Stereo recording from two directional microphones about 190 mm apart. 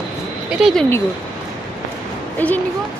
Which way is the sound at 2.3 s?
10° left (ahead or behind).